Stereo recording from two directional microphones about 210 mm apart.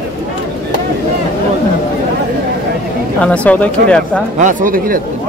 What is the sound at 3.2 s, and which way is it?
Speech, 5° left (ahead or behind).